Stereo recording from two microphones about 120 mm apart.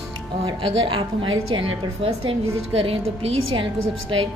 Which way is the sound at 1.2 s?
45° right (ahead or behind).